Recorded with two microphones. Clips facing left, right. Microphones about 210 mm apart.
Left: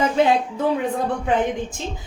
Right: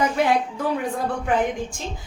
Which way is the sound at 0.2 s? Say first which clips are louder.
Left 3 dB; 25° left (ahead or behind).